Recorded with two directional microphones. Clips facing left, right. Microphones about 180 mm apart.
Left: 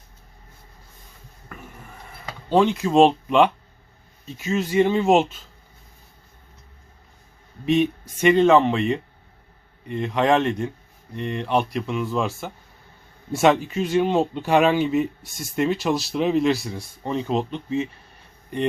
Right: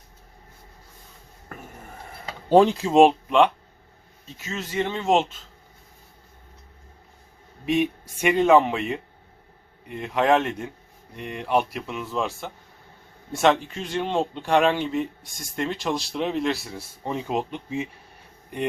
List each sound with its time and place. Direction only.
1.5 s a sound: 40° right (ahead or behind)
2.5 s speech: 35° right (ahead or behind)
2.9 s speech: 10° right (ahead or behind)
3.2 s speech: centre (ahead or behind)
4.4 s speech: 15° left (ahead or behind)
7.6 s speech: 10° right (ahead or behind)